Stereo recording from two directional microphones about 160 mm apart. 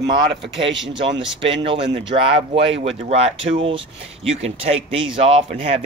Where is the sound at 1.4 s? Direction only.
35° right (ahead or behind).